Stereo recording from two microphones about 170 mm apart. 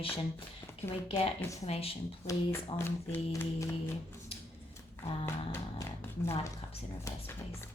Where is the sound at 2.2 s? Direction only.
15° left (ahead or behind).